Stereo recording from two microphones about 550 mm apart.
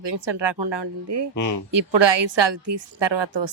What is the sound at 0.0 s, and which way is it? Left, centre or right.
A woman's voice, right.